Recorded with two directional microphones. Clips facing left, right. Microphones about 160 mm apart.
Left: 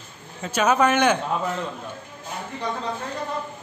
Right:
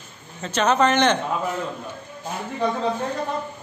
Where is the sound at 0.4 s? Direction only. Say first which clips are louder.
Even; 10° left (ahead or behind).